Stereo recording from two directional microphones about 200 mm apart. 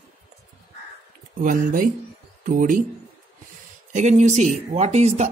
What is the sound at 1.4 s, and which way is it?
Speech, 40° right (ahead or behind).